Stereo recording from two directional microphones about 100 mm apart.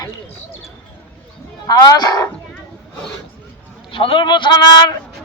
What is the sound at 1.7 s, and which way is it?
Speech, 40° left (ahead or behind).